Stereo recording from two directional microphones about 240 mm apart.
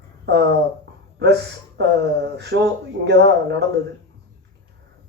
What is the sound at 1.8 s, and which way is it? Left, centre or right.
Speech, right.